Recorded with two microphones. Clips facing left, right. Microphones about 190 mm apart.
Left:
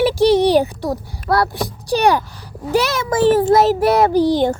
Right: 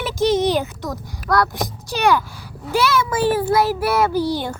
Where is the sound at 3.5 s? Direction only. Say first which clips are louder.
Left 5 dB; 40° left (ahead or behind).